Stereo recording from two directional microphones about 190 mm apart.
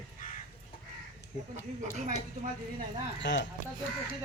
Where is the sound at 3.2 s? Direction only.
70° left (ahead or behind).